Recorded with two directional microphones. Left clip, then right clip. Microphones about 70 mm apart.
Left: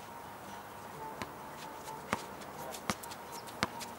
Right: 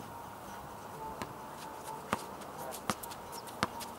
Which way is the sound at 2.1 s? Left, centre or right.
Centre.